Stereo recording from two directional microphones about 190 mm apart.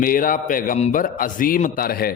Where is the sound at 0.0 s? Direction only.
45° left (ahead or behind).